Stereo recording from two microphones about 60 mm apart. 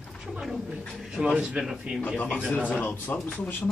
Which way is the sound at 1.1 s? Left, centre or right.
Centre.